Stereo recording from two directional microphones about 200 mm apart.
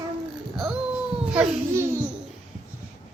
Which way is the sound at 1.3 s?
10° right (ahead or behind).